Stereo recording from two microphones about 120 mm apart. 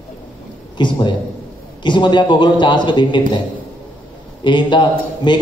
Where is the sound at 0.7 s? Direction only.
40° left (ahead or behind).